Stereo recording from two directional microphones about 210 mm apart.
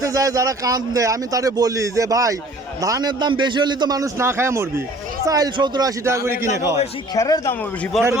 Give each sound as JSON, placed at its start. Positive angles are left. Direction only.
{"t": 0.0, "sound": "a man's voice", "side_deg": -15}
{"t": 7.2, "sound": "speech", "side_deg": 15}